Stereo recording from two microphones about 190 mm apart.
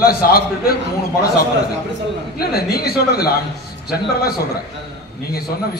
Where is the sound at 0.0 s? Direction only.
50° left (ahead or behind).